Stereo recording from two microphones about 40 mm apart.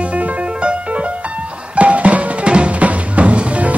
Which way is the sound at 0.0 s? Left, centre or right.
Right.